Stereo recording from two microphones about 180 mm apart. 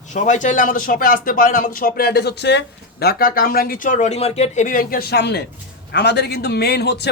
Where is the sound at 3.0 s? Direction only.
55° left (ahead or behind).